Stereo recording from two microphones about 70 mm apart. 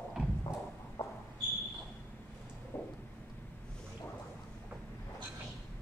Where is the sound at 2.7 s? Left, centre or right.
Left.